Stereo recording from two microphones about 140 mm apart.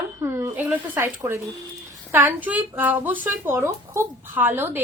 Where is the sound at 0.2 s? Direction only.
20° right (ahead or behind).